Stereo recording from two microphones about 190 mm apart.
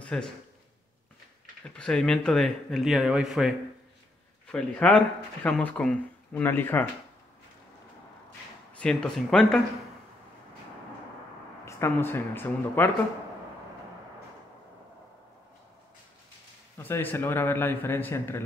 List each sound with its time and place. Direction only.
0.0 s speech: 5° left (ahead or behind)
1.8 s speech: 5° left (ahead or behind)
8.7 s speech: 5° left (ahead or behind)
11.6 s speech: 10° left (ahead or behind)
16.7 s speech: 10° left (ahead or behind)